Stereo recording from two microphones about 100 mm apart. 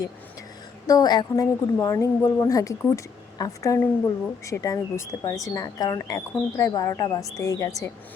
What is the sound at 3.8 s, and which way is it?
Speech, 25° left (ahead or behind).